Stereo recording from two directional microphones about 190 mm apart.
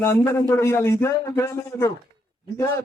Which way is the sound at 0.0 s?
15° left (ahead or behind).